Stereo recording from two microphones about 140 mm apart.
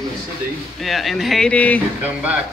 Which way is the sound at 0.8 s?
Centre (ahead or behind).